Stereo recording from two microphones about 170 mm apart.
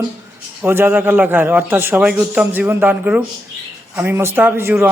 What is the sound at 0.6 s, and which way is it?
A man's voice, 10° right (ahead or behind).